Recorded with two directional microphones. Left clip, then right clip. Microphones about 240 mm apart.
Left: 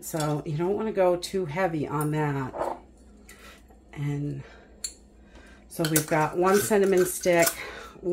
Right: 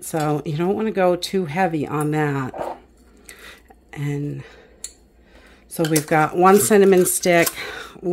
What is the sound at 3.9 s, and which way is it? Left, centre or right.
Speech, right.